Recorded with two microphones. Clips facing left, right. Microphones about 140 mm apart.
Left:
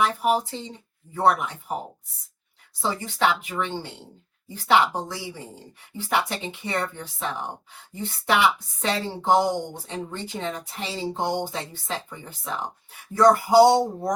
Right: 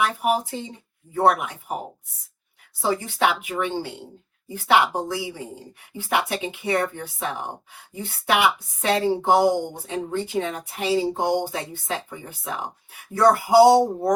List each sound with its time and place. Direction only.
0.1 s speech: 10° right (ahead or behind)
2.8 s speech: 10° right (ahead or behind)
8.8 s speech: 10° right (ahead or behind)